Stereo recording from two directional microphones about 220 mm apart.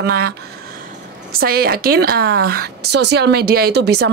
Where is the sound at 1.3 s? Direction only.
45° right (ahead or behind).